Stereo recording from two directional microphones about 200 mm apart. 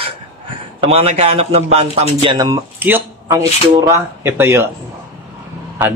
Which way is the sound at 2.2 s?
20° right (ahead or behind).